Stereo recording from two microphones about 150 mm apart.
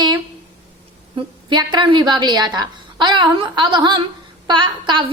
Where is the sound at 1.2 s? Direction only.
30° right (ahead or behind).